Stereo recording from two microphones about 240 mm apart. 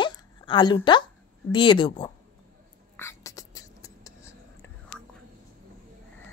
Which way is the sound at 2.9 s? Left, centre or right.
Centre.